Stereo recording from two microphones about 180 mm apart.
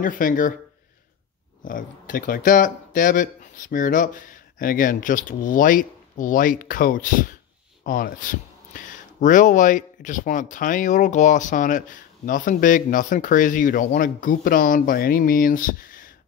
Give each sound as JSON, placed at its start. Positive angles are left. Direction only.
{"t": 0.0, "sound": "speech", "side_deg": 50}
{"t": 1.6, "sound": "speech", "side_deg": 50}